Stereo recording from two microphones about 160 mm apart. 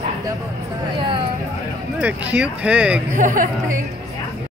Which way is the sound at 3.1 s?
55° right (ahead or behind).